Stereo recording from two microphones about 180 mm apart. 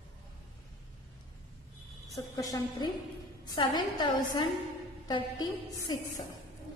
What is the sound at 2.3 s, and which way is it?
A woman's voice, 20° left (ahead or behind).